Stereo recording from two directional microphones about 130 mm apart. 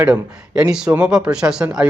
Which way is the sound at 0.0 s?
10° right (ahead or behind).